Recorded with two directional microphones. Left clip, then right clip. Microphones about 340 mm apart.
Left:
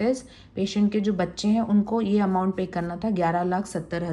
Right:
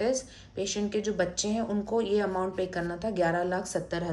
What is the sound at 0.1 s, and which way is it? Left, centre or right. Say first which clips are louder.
A woman's voice: left 3 dB; centre.